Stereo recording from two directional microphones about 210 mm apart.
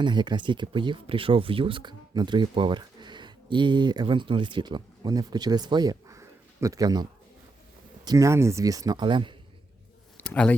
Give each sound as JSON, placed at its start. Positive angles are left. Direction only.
{"t": 0.0, "sound": "speech", "side_deg": -20}
{"t": 10.2, "sound": "speech", "side_deg": 5}